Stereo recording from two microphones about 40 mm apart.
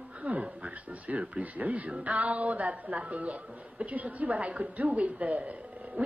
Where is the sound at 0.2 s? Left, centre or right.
Right.